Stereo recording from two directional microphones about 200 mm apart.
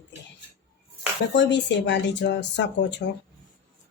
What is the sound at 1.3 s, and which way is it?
Speech, 60° left (ahead or behind).